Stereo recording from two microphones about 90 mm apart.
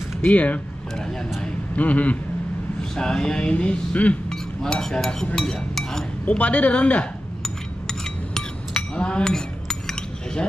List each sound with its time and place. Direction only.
0.2 s speech: 15° left (ahead or behind)
1.4 s a sound: 15° left (ahead or behind)
2.8 s chink: 10° left (ahead or behind)
6.2 s speech: 15° left (ahead or behind)
7.4 s chink: 5° left (ahead or behind)